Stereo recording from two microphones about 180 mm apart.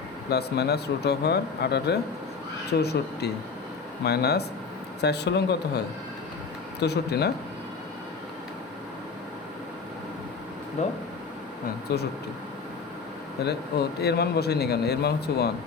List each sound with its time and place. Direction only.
0.3 s speech: 65° left (ahead or behind)
10.8 s speech: 40° left (ahead or behind)
11.9 s speech: 65° left (ahead or behind)
13.4 s speech: 65° left (ahead or behind)